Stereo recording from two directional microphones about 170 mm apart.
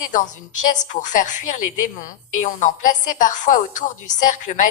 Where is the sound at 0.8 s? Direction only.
45° left (ahead or behind).